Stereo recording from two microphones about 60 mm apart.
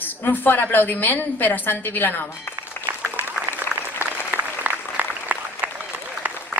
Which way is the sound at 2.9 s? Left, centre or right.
Right.